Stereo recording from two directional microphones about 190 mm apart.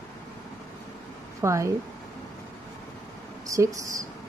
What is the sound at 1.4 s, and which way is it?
Speech, 15° right (ahead or behind).